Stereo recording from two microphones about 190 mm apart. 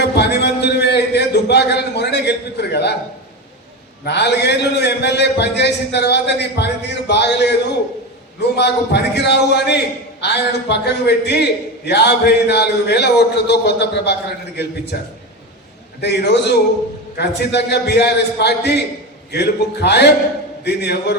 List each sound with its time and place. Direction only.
0.0 s a sound: 60° left (ahead or behind)
4.0 s a man's voice: 60° left (ahead or behind)
16.0 s a man's voice: 60° left (ahead or behind)